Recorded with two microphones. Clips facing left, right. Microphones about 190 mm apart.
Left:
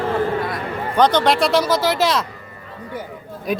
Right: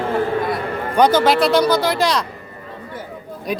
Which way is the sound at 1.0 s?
5° right (ahead or behind).